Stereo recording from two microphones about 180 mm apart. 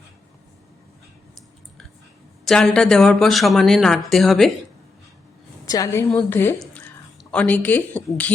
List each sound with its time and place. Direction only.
2.4 s speech: centre (ahead or behind)
5.6 s a woman's voice: 20° left (ahead or behind)